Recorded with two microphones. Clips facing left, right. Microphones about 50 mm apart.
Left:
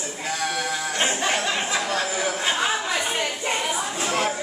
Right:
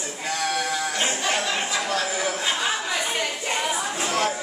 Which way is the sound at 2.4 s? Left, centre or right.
Left.